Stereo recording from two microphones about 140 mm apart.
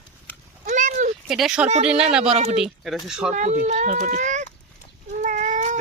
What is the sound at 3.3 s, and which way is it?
Speech, 65° right (ahead or behind).